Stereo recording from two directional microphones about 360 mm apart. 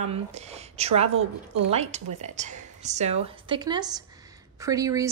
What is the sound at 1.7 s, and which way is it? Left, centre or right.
A woman's voice, centre.